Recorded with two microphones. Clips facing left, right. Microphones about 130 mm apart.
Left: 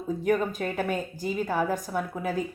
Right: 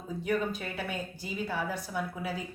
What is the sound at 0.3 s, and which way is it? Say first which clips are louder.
Speech: left 5 dB; 45° left (ahead or behind).